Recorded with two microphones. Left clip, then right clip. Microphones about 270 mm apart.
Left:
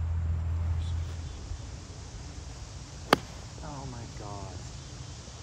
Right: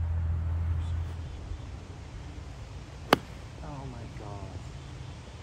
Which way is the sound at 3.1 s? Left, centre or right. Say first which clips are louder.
Even; centre.